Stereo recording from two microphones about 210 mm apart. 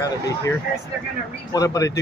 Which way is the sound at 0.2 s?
15° left (ahead or behind).